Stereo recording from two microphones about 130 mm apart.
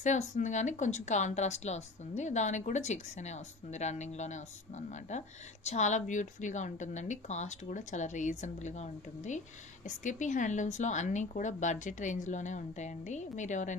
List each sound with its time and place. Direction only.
0.0 s a woman's voice: 65° left (ahead or behind)